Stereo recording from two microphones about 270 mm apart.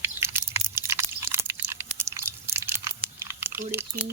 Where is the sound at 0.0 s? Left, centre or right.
Centre.